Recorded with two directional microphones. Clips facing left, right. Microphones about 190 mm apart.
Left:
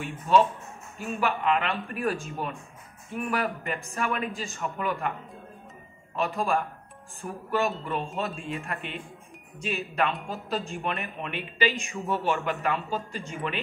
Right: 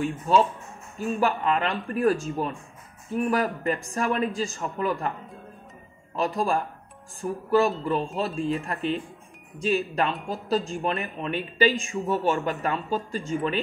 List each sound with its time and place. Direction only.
0.9 s speech: 40° right (ahead or behind)
6.1 s speech: 40° right (ahead or behind)